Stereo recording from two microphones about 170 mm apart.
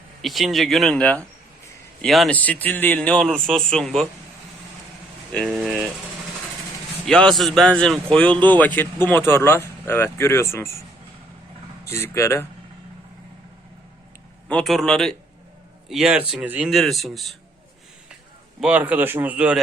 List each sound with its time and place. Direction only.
0.2 s speech: centre (ahead or behind)
5.3 s speech: 5° left (ahead or behind)
7.0 s a man's voice: 5° left (ahead or behind)
11.9 s a man's voice: 15° left (ahead or behind)
14.4 s speech: 5° left (ahead or behind)
18.6 s speech: 10° right (ahead or behind)